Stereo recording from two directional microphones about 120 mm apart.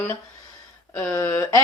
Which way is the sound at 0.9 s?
20° left (ahead or behind).